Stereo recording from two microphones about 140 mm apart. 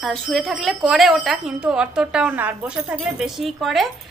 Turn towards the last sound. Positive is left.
turn(degrees=0)  # may be behind; listen again after turning